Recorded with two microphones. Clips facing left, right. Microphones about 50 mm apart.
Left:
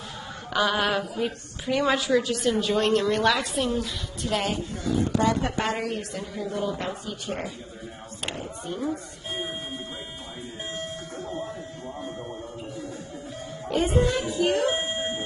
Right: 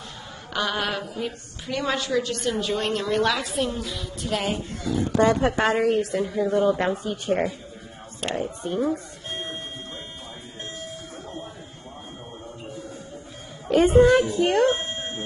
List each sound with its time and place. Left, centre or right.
0.5 s a woman's voice: centre
5.2 s speech: right
5.8 s speech: right
6.5 s speech: right
8.4 s speech: right
13.7 s speech: right
14.8 s dog: centre